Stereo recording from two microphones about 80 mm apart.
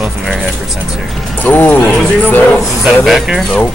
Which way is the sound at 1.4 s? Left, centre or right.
Left.